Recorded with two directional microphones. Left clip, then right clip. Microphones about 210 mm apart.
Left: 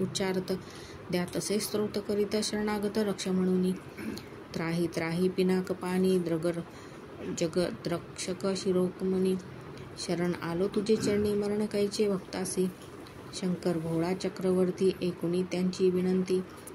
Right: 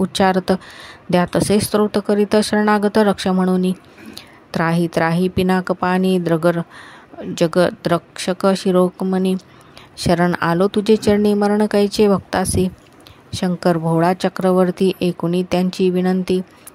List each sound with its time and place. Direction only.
0.1 s speech: 45° right (ahead or behind)